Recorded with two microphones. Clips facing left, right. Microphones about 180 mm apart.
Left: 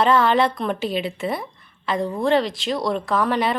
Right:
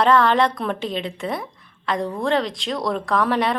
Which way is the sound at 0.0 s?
Centre (ahead or behind).